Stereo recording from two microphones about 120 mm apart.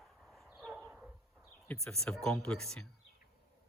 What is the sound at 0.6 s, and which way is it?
Dog, centre (ahead or behind).